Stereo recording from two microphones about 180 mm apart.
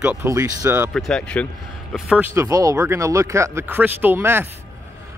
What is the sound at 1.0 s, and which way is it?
Speech, 5° left (ahead or behind).